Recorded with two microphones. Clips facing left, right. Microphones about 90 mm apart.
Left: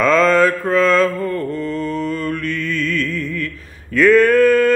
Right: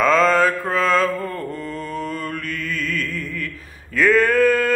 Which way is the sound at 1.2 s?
15° right (ahead or behind).